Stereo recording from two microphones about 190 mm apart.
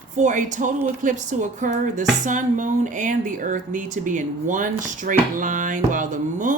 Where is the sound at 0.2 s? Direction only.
40° right (ahead or behind).